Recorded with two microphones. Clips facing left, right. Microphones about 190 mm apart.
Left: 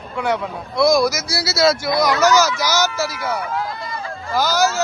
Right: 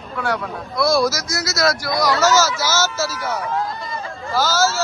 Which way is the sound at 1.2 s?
30° left (ahead or behind).